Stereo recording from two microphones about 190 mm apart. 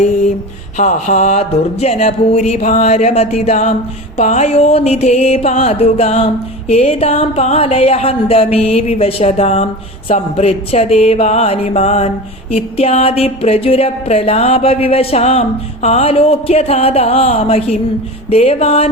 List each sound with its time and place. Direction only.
0.8 s mantra: 40° left (ahead or behind)